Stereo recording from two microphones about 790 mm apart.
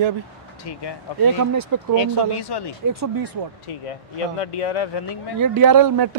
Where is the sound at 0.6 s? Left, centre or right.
Left.